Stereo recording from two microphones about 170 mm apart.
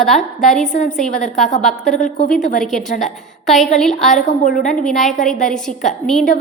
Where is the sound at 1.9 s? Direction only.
50° left (ahead or behind).